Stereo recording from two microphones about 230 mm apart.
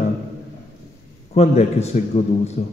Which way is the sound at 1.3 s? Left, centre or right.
Left.